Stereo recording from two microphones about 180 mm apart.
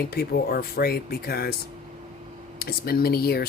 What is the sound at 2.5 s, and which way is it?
Speech, 60° left (ahead or behind).